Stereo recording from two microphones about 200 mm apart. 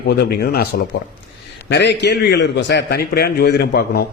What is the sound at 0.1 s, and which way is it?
A man's voice, 55° left (ahead or behind).